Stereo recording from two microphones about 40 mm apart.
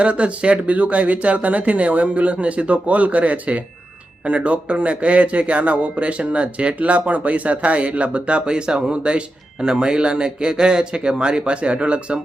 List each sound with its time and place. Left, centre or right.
0.0 s a man's voice: right